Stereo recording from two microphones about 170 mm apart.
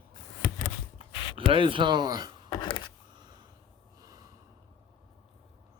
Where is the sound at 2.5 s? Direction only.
25° left (ahead or behind).